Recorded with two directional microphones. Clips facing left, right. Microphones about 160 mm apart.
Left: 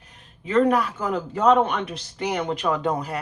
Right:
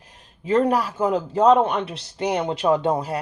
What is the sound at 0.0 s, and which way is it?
A man's voice, 35° right (ahead or behind).